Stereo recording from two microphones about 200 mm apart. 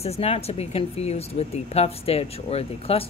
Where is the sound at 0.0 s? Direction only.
30° left (ahead or behind).